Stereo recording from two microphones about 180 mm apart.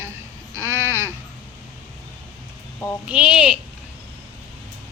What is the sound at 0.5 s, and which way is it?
Sheep, 15° right (ahead or behind).